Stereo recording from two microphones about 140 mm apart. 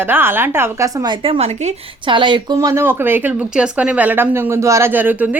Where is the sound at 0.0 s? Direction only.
15° right (ahead or behind); by 2.6 s 35° right (ahead or behind).